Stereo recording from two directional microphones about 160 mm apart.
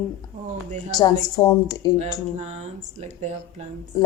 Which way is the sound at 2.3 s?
45° right (ahead or behind).